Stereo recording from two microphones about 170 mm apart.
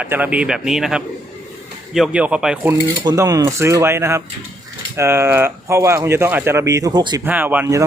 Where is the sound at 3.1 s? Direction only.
20° right (ahead or behind).